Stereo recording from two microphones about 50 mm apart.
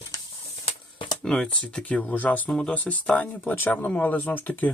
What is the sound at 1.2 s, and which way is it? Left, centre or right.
Speech, centre.